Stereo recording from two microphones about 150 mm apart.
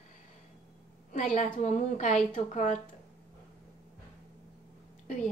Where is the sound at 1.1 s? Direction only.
50° left (ahead or behind).